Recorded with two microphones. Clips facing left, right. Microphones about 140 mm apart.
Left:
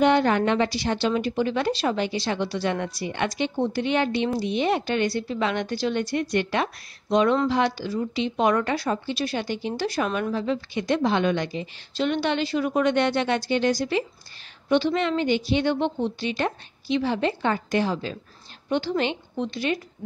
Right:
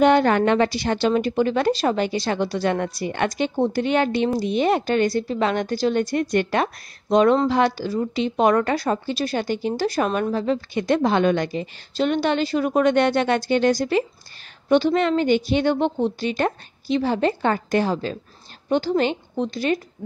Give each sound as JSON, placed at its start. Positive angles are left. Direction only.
{"t": 0.0, "sound": "a woman's voice", "side_deg": -55}